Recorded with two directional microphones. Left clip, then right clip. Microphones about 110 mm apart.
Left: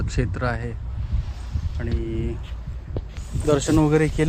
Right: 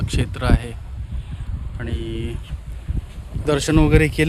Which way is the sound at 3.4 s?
25° right (ahead or behind).